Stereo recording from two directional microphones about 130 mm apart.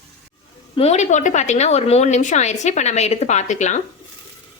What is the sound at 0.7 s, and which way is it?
A woman's voice, 55° left (ahead or behind).